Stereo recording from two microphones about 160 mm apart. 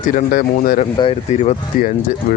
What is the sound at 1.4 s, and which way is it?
Speech, 50° left (ahead or behind).